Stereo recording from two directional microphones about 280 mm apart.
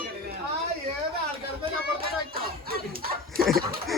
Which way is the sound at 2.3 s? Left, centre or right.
Right.